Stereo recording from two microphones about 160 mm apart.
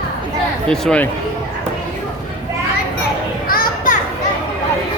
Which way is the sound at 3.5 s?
60° left (ahead or behind).